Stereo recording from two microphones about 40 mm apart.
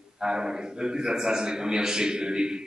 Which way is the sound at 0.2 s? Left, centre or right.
Centre.